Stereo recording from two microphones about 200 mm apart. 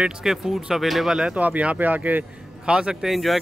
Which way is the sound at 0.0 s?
Centre (ahead or behind).